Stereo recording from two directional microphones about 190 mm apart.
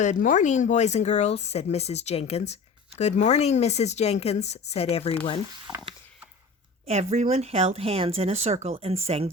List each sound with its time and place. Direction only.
0.0 s speech: 40° left (ahead or behind)
6.8 s speech: 35° right (ahead or behind)